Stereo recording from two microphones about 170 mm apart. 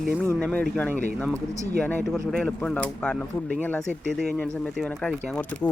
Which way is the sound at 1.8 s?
10° left (ahead or behind).